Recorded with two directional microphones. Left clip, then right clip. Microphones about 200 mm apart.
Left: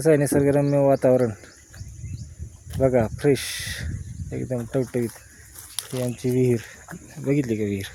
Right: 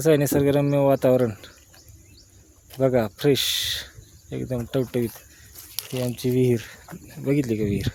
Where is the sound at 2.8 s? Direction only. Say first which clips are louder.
Left 1 dB; centre (ahead or behind).